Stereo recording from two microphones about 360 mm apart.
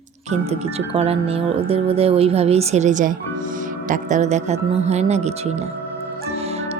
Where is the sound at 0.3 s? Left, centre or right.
Centre.